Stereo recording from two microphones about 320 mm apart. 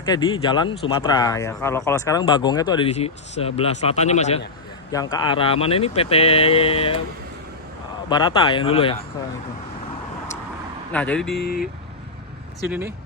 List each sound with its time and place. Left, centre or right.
0.0 s speech: centre
8.1 s speech: centre
10.9 s speech: centre
12.6 s speech: centre